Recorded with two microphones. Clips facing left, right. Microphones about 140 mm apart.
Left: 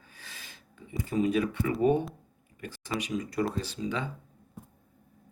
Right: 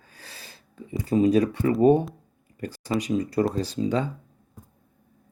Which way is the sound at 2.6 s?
35° right (ahead or behind).